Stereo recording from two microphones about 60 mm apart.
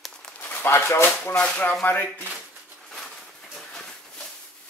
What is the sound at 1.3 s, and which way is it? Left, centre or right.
Speech, centre.